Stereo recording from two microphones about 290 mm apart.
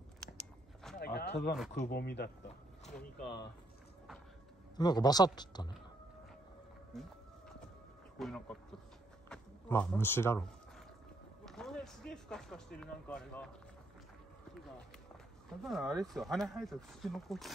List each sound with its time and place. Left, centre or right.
0.9 s a sound: left
1.9 s speech: left
4.7 s speech: centre
6.9 s a sound: centre
8.2 s speech: centre
11.4 s speech: centre
15.6 s speech: centre